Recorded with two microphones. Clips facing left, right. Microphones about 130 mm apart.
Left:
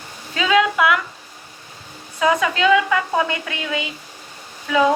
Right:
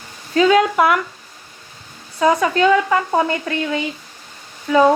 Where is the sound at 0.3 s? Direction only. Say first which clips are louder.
Right 4 dB; 40° right (ahead or behind).